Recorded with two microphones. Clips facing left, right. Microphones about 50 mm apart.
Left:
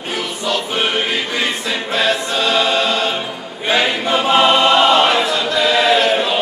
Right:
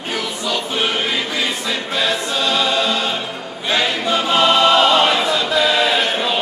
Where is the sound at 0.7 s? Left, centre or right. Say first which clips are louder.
Even; centre.